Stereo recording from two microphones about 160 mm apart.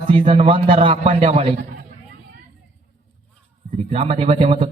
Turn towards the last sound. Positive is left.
turn(degrees=-35)  # may be behind; listen again after turning